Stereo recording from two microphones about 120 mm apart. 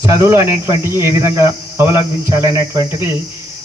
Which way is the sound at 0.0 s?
25° right (ahead or behind).